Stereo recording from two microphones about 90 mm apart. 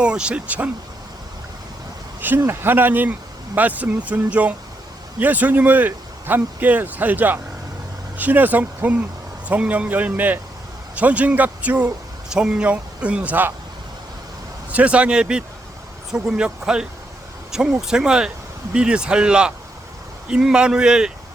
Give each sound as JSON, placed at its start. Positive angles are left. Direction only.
{"t": 0.0, "sound": "speech", "side_deg": -10}
{"t": 2.2, "sound": "speech", "side_deg": -25}
{"t": 14.7, "sound": "speech", "side_deg": -15}